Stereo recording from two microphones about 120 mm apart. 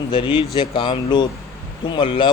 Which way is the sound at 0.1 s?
40° left (ahead or behind).